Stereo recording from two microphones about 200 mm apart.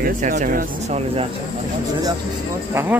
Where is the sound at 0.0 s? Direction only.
40° right (ahead or behind).